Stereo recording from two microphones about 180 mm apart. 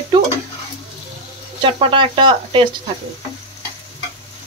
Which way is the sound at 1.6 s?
30° right (ahead or behind).